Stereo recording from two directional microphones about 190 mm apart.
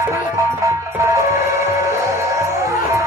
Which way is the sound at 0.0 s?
15° right (ahead or behind).